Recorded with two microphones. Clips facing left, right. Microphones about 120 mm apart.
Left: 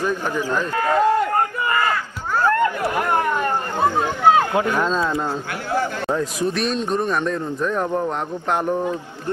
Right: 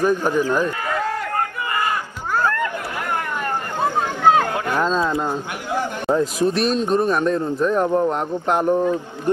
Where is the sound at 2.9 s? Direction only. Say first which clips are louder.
Left 5 dB; 30° left (ahead or behind).